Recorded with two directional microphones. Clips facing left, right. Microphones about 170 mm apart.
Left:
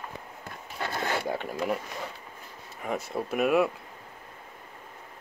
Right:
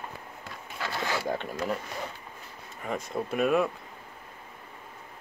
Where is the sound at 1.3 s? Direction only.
10° left (ahead or behind).